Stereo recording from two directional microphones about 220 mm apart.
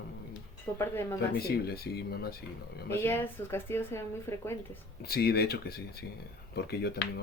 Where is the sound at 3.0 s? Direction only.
10° left (ahead or behind).